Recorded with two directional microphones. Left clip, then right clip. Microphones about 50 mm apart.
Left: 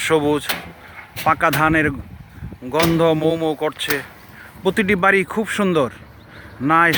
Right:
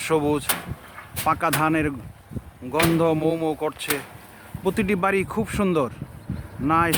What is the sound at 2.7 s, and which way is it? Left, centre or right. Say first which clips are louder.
Speech: left 3 dB; left.